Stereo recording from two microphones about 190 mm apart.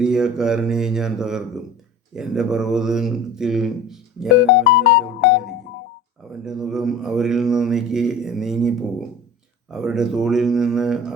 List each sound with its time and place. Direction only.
0.0 s speech: 5° right (ahead or behind)
4.6 s music: 75° left (ahead or behind)
6.4 s speech: 5° right (ahead or behind)
9.7 s speech: 5° right (ahead or behind)